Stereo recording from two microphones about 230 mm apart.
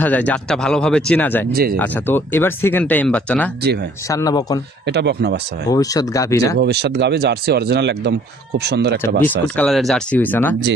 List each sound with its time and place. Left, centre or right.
0.0 s speech: centre
1.5 s speech: right
1.8 s speech: centre
4.8 s speech: right
5.7 s speech: centre
6.6 s speech: right
9.2 s speech: centre